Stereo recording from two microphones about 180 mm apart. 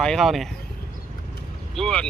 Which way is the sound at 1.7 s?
5° left (ahead or behind).